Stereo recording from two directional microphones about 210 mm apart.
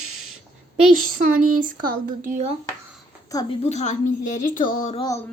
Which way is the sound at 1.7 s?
45° right (ahead or behind).